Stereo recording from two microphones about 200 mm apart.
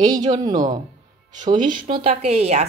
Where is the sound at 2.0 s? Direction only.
30° right (ahead or behind).